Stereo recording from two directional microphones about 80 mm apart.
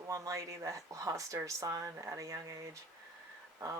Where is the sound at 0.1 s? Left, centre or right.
Right.